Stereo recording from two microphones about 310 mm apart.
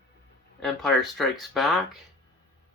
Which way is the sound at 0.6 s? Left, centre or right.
Centre.